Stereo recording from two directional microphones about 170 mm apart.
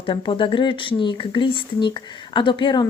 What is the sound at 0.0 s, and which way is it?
Speech, 30° left (ahead or behind).